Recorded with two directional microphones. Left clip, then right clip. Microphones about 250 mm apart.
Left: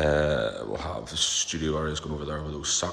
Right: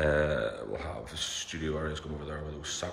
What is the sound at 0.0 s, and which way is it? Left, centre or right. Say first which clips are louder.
Speech: left 4 dB; centre.